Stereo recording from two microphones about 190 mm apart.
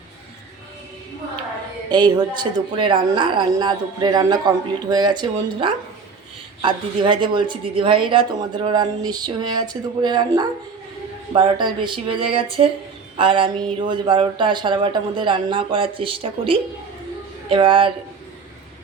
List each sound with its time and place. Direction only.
1.9 s speech: 20° right (ahead or behind)